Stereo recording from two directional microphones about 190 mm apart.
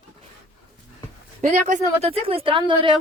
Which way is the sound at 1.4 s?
40° right (ahead or behind).